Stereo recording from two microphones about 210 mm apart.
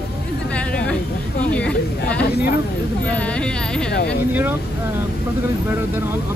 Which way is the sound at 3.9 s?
55° left (ahead or behind).